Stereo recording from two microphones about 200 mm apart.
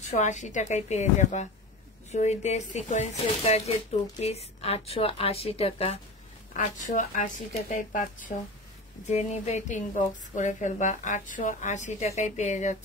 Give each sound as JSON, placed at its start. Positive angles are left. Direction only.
{"t": 0.0, "sound": "a woman's voice", "side_deg": 35}